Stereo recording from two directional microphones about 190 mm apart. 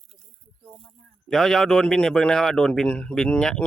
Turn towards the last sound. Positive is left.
turn(degrees=5)  # may be behind; listen again after turning